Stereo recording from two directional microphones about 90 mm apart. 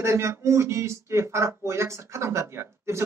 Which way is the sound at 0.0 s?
30° right (ahead or behind).